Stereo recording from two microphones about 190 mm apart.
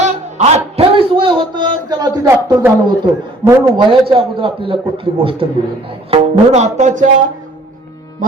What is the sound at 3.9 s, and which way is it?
A man's voice, 25° right (ahead or behind).